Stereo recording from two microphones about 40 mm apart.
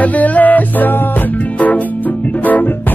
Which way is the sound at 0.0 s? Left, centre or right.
Left.